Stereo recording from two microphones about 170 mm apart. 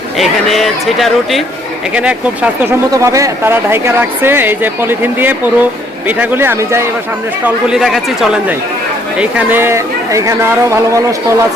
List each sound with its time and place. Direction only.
0.2 s speech: centre (ahead or behind); by 6.8 s 15° right (ahead or behind)
7.4 s speech: 5° right (ahead or behind)